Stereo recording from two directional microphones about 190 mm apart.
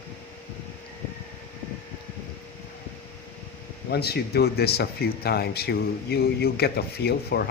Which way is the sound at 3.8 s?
55° left (ahead or behind).